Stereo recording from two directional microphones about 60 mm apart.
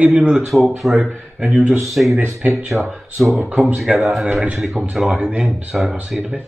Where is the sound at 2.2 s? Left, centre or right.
Right.